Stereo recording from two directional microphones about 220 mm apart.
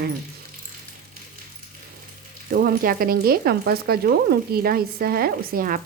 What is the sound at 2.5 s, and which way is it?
Frying, 40° right (ahead or behind).